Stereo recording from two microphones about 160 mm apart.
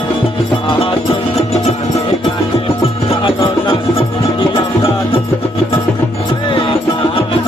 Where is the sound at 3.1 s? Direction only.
35° left (ahead or behind).